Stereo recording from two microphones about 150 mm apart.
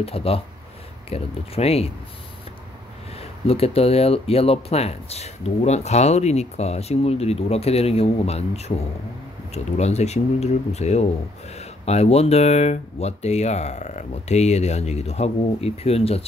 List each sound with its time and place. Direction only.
0.0 s speech: 40° left (ahead or behind)
3.2 s speech: 40° left (ahead or behind)